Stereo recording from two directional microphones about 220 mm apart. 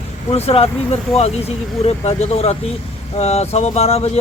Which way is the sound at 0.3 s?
25° left (ahead or behind).